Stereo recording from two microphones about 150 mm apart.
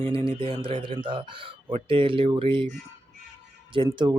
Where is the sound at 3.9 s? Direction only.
30° right (ahead or behind).